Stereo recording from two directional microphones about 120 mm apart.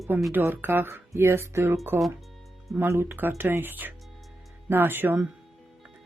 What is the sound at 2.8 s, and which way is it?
Speech, 20° right (ahead or behind).